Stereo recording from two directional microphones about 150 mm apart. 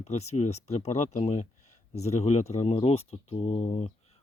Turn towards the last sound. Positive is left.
turn(degrees=45)  # may be behind; listen again after turning